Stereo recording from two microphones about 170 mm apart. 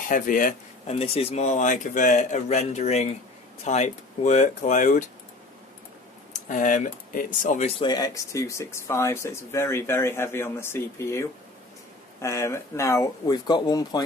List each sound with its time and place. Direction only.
0.1 s speech: 50° left (ahead or behind)
0.8 s speech: 35° left (ahead or behind)
6.3 s speech: 50° left (ahead or behind)
7.8 s speech: 20° left (ahead or behind)